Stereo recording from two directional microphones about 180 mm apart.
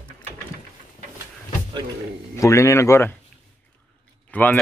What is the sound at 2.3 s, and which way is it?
Speech, 15° left (ahead or behind).